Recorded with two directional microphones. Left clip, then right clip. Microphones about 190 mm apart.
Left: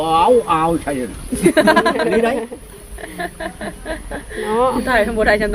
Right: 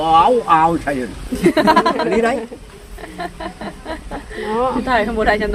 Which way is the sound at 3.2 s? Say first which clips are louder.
Left 1 dB; 10° right (ahead or behind).